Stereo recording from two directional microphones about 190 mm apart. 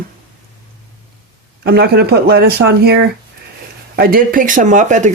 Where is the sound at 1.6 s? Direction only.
55° right (ahead or behind).